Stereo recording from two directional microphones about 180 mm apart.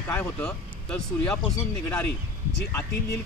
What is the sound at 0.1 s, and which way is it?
Speech, 5° left (ahead or behind).